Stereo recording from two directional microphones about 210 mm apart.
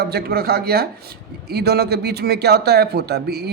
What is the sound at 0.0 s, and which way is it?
Speech, 50° right (ahead or behind).